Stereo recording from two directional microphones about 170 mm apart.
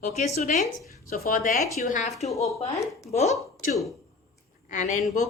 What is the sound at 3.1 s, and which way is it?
A woman's voice, 40° left (ahead or behind).